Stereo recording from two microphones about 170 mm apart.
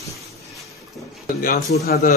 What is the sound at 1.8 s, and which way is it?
Speech, 65° left (ahead or behind).